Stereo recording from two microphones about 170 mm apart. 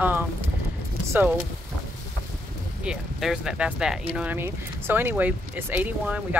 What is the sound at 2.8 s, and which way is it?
Speech, 5° right (ahead or behind).